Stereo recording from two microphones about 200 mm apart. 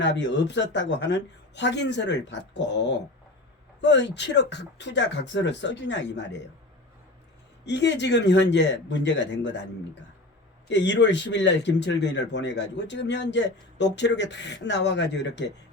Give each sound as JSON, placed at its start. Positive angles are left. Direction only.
{"t": 0.0, "sound": "speech", "side_deg": 60}
{"t": 7.6, "sound": "speech", "side_deg": 60}
{"t": 10.7, "sound": "speech", "side_deg": 60}